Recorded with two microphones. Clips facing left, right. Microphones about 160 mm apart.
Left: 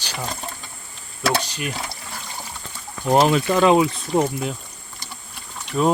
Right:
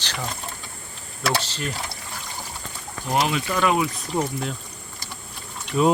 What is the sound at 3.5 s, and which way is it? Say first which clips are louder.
Speech: left 6 dB; 25° left (ahead or behind).